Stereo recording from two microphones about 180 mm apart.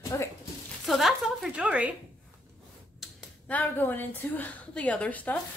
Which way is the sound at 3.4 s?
10° left (ahead or behind).